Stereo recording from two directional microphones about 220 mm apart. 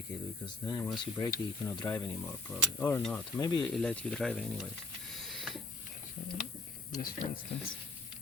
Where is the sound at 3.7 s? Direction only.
5° left (ahead or behind).